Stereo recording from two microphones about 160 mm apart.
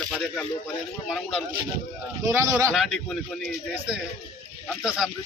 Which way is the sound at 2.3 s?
15° right (ahead or behind).